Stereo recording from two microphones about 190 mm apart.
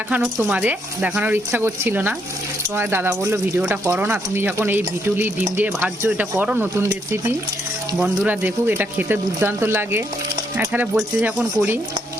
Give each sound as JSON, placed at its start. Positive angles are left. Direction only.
{"t": 0.1, "sound": "speech", "side_deg": -5}